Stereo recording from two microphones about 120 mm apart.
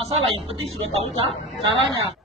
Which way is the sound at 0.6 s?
55° right (ahead or behind).